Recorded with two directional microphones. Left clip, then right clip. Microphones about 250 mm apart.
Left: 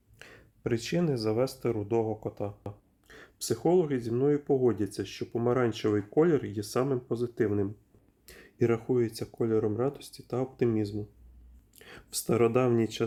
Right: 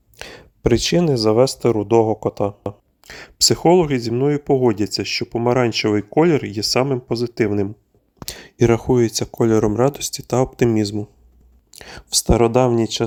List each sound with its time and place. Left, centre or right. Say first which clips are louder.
0.2 s speech: right 16 dB; right